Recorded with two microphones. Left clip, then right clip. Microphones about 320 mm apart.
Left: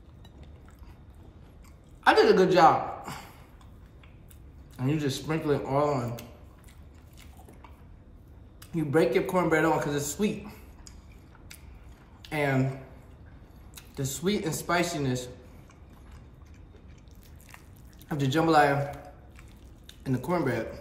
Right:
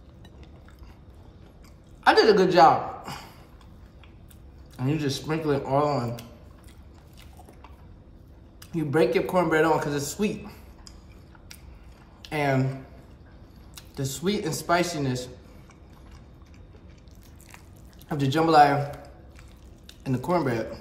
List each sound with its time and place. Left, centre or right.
2.0 s a woman's voice: centre
4.7 s speech: centre
8.5 s speech: centre
12.2 s speech: centre
13.7 s speech: centre
18.0 s speech: centre